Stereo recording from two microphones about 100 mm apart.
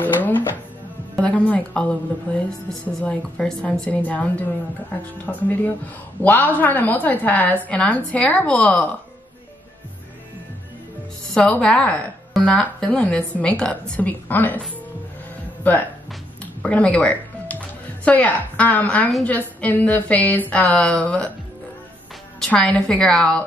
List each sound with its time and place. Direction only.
0.0 s a woman's voice: 20° left (ahead or behind)
11.3 s a woman's voice: 10° left (ahead or behind)
15.6 s a woman's voice: 15° left (ahead or behind)
22.4 s a woman's voice: 10° left (ahead or behind)